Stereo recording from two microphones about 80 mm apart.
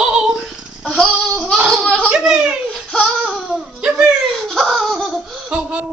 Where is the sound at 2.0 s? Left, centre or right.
Centre.